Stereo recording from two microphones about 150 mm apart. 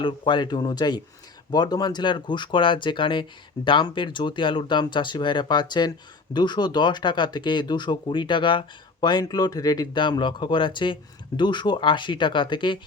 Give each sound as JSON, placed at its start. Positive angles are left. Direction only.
{"t": 0.0, "sound": "speech", "side_deg": 30}